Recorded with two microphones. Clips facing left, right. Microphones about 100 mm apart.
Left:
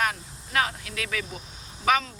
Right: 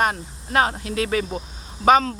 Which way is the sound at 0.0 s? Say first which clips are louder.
Right 6 dB; 35° right (ahead or behind).